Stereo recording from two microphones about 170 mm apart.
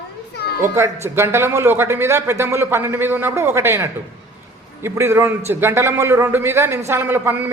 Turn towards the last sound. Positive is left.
turn(degrees=-15)  # may be behind; listen again after turning